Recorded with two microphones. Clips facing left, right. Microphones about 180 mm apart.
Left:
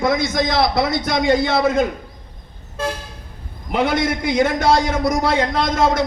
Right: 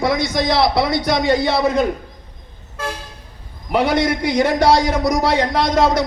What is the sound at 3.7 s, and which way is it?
A man's voice, 50° left (ahead or behind).